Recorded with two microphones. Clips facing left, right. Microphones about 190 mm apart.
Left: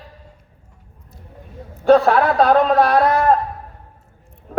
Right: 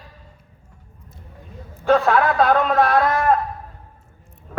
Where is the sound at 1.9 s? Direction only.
35° left (ahead or behind).